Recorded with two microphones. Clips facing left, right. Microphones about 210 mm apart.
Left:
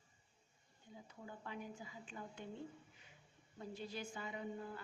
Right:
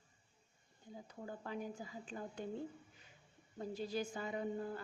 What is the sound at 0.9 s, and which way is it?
A woman's voice, 40° right (ahead or behind).